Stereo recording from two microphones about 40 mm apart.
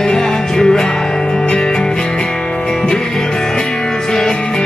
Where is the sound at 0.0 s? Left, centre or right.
Centre.